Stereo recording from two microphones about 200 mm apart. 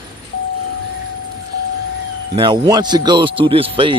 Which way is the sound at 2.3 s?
20° right (ahead or behind).